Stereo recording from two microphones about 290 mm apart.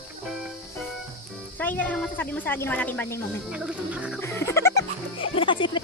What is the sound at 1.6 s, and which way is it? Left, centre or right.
Speech, centre.